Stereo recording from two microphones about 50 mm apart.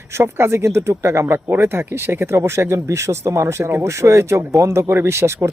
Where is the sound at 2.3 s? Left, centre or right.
Right.